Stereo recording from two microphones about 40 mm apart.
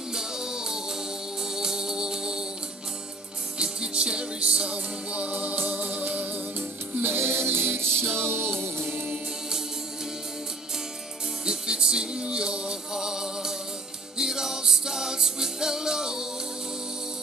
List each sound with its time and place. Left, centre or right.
0.1 s music: centre
3.5 s music: right
7.0 s music: right
11.4 s music: centre